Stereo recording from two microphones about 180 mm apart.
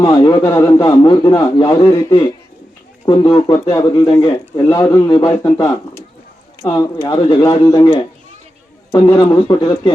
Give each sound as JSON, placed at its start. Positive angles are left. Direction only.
{"t": 0.0, "sound": "a man's voice", "side_deg": 25}
{"t": 8.9, "sound": "a man's voice", "side_deg": 20}